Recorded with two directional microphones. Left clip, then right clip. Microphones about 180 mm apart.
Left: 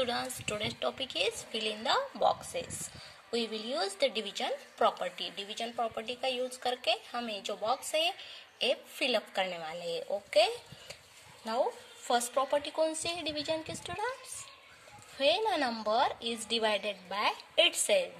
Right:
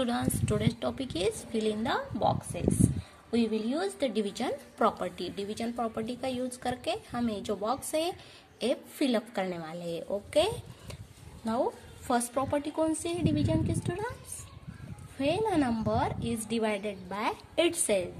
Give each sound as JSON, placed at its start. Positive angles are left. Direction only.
{"t": 0.0, "sound": "a woman's voice", "side_deg": 15}
{"t": 4.1, "sound": "a woman's voice", "side_deg": 10}
{"t": 10.3, "sound": "a sound", "side_deg": 10}
{"t": 12.1, "sound": "a woman's voice", "side_deg": 20}
{"t": 15.1, "sound": "a woman's voice", "side_deg": 30}